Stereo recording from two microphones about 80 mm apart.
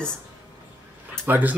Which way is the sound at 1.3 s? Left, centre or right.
Centre.